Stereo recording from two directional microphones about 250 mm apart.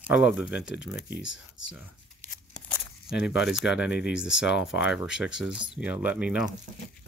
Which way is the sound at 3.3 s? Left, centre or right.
Centre.